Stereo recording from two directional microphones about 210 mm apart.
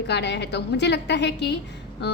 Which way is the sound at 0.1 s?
55° left (ahead or behind).